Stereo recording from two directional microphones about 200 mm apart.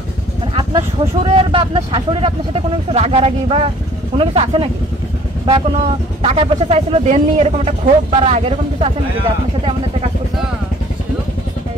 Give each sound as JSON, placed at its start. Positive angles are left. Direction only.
{"t": 0.6, "sound": "speech", "side_deg": -25}
{"t": 6.2, "sound": "speech", "side_deg": -30}